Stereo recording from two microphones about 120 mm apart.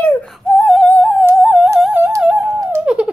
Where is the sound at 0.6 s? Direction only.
Centre (ahead or behind).